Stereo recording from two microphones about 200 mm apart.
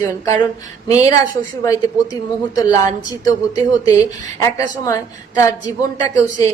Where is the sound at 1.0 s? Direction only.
15° left (ahead or behind).